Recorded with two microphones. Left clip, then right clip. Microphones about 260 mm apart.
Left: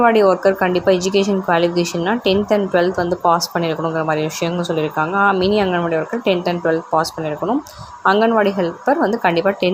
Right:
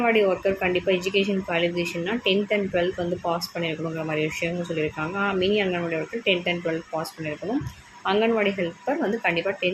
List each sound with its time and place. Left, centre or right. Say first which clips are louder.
0.0 s speech: left 8 dB; centre